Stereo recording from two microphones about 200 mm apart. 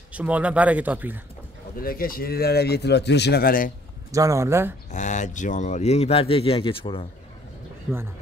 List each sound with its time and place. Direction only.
0.1 s speech: 5° right (ahead or behind)
1.8 s speech: 45° left (ahead or behind)
4.1 s speech: 15° right (ahead or behind)
4.9 s speech: 35° left (ahead or behind)